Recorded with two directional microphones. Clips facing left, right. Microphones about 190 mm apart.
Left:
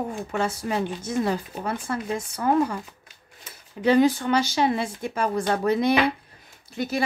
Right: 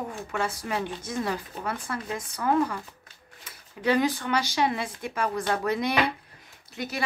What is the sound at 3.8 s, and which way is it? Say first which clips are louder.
Speech: left 5 dB; 30° left (ahead or behind).